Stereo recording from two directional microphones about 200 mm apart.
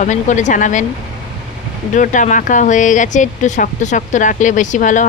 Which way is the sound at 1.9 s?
40° left (ahead or behind).